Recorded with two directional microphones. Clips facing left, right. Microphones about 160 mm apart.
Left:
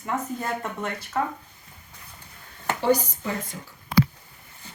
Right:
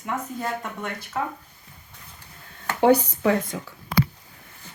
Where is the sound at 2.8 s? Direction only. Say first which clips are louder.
Right 5 dB; 70° right (ahead or behind).